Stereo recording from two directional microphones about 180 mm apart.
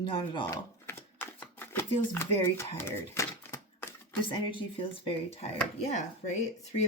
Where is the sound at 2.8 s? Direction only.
15° left (ahead or behind).